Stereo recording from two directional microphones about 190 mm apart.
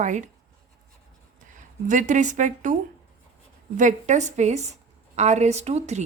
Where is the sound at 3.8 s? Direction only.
40° right (ahead or behind).